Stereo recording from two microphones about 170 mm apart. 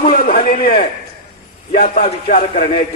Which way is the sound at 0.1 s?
65° left (ahead or behind).